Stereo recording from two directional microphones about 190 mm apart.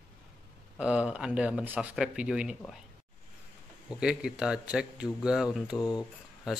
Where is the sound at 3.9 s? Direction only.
5° right (ahead or behind).